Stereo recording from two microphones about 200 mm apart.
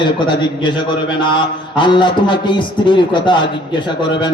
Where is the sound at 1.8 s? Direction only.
25° left (ahead or behind).